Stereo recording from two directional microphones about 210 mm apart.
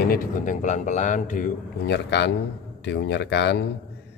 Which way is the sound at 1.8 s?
55° left (ahead or behind).